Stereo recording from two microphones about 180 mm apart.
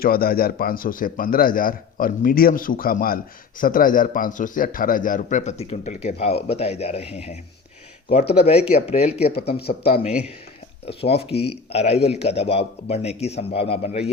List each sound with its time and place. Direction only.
0.0 s a man's voice: 55° left (ahead or behind); by 7.1 s 35° left (ahead or behind)
8.4 s a man's voice: 35° left (ahead or behind)
9.3 s speech: 60° left (ahead or behind)
10.8 s a man's voice: 35° left (ahead or behind)